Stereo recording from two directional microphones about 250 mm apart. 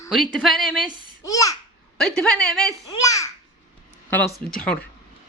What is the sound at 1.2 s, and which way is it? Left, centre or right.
Babbling, centre.